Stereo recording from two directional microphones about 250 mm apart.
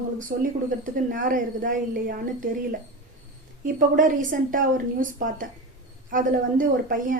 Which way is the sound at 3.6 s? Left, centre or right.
Right.